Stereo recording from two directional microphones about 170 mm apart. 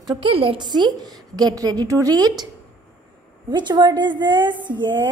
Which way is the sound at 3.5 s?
25° right (ahead or behind).